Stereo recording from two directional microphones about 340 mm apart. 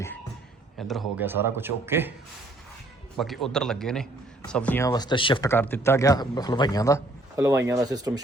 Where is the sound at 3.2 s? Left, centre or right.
Centre.